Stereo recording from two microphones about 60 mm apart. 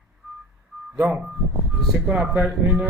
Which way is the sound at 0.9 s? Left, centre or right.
Centre.